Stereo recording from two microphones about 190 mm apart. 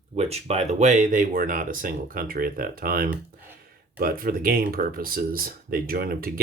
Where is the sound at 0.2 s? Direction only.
35° right (ahead or behind).